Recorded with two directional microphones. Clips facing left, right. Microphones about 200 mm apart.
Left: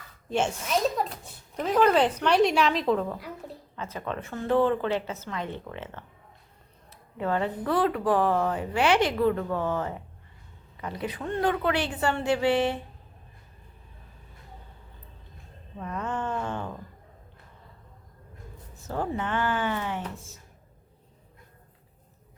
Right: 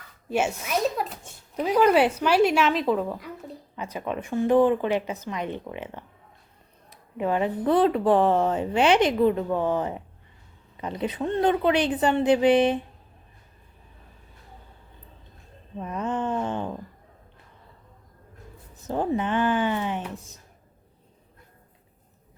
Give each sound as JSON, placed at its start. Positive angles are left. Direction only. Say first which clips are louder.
{"t": 0.3, "sound": "a woman's voice", "louder": "right 1 dB", "side_deg": -10}
{"t": 15.8, "sound": "a sound", "louder": "right 4 dB", "side_deg": -20}
{"t": 18.8, "sound": "a woman's voice", "louder": "right 5 dB", "side_deg": -20}